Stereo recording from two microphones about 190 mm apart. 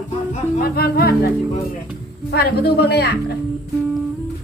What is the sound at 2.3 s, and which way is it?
Speech, 55° left (ahead or behind).